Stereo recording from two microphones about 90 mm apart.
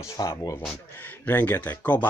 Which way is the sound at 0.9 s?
20° left (ahead or behind).